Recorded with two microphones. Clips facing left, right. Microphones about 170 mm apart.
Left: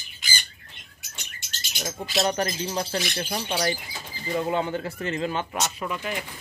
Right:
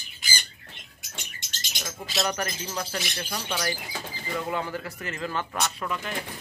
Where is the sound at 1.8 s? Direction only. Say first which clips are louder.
Left 4 dB; 25° left (ahead or behind).